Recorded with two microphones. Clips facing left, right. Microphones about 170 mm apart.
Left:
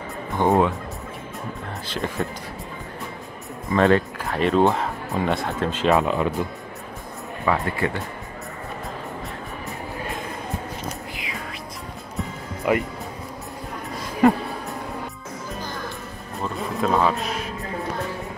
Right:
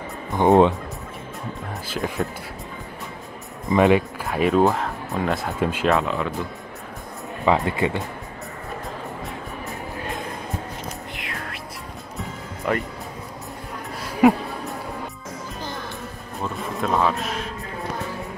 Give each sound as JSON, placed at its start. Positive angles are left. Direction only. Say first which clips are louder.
{"t": 0.4, "sound": "speech", "louder": "right 4 dB", "side_deg": -25}
{"t": 1.9, "sound": "speech", "louder": "right 1 dB", "side_deg": -5}
{"t": 3.7, "sound": "speech", "louder": "right 1 dB", "side_deg": -15}
{"t": 5.9, "sound": "speech", "louder": "left 3 dB", "side_deg": 15}
{"t": 7.4, "sound": "speech", "louder": "right 3 dB", "side_deg": -20}
{"t": 11.1, "sound": "music", "louder": "even", "side_deg": 0}
{"t": 12.7, "sound": "speech", "louder": "left 3 dB", "side_deg": 10}
{"t": 14.2, "sound": "speech", "louder": "right 1 dB", "side_deg": -5}
{"t": 16.3, "sound": "music", "louder": "left 1 dB", "side_deg": 0}